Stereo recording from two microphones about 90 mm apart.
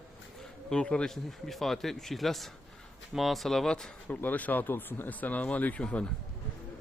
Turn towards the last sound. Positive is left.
turn(degrees=15)  # may be behind; listen again after turning